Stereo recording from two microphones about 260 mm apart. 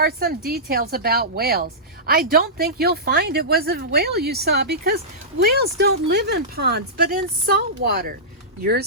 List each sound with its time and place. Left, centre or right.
0.0 s a woman's voice: right